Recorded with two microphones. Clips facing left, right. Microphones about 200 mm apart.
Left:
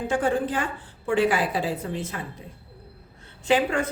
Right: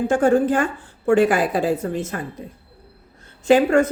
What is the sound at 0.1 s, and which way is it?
A woman's voice, 45° right (ahead or behind).